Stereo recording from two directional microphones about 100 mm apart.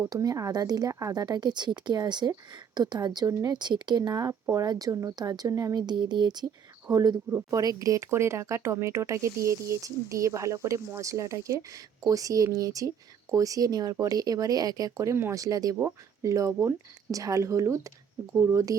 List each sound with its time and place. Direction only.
0.1 s a woman's voice: 35° right (ahead or behind)
7.3 s speech: 25° right (ahead or behind)